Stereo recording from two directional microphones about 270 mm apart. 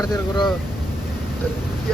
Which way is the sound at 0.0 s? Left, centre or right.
Centre.